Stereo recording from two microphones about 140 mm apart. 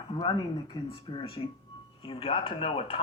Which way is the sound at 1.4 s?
40° left (ahead or behind).